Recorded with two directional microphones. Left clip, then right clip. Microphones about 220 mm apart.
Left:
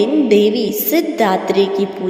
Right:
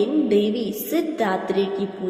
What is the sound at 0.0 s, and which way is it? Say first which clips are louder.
A woman's voice: left 7 dB; 35° left (ahead or behind).